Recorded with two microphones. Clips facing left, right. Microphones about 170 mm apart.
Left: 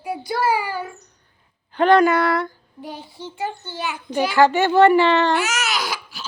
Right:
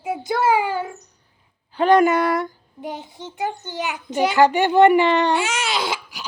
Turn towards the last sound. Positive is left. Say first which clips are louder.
# right 1 dB
turn(degrees=-25)  # may be behind; listen again after turning